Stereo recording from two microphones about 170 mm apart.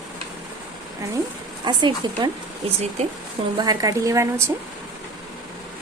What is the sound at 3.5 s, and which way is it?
Speech, 20° right (ahead or behind).